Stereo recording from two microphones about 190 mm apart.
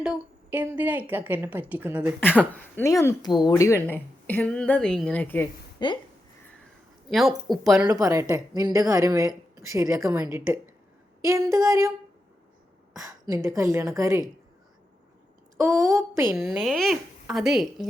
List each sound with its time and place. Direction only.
0.0 s a woman's voice: 5° right (ahead or behind)
2.2 s speech: 10° left (ahead or behind)
5.8 s speech: 25° left (ahead or behind)
7.1 s speech: centre (ahead or behind)
7.9 s a woman's voice: 20° right (ahead or behind)
13.1 s a woman's voice: 20° right (ahead or behind)
15.5 s a woman's voice: 15° right (ahead or behind)
16.6 s speech: centre (ahead or behind)